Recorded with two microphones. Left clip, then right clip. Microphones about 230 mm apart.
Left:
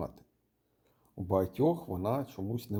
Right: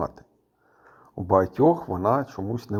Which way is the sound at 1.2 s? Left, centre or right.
Right.